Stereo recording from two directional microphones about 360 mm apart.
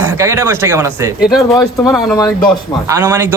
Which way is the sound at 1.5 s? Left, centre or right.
Centre.